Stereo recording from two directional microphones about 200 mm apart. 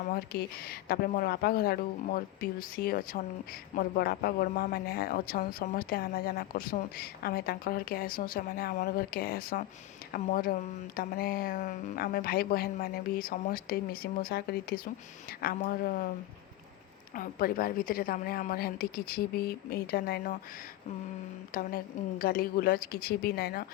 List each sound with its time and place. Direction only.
0.1 s speech: 50° left (ahead or behind)
17.2 s speech: 45° left (ahead or behind)
21.5 s speech: 45° left (ahead or behind)